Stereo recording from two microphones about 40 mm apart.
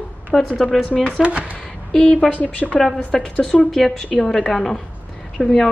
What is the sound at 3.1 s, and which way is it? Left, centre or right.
Speech, centre.